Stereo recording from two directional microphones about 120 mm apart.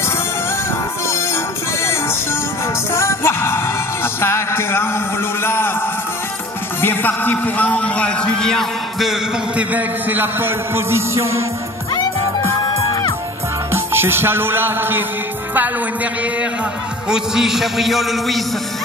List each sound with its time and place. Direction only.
2.9 s music: 20° left (ahead or behind)
5.4 s a man's voice: 20° left (ahead or behind)
6.8 s a man's voice: 15° left (ahead or behind)
9.6 s a man's voice: 15° right (ahead or behind)
13.7 s music: 20° right (ahead or behind)
17.1 s a man's voice: 5° right (ahead or behind)